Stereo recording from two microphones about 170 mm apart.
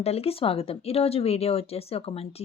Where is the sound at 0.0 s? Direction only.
35° left (ahead or behind).